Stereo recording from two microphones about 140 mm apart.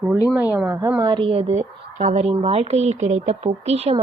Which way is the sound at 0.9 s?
30° right (ahead or behind).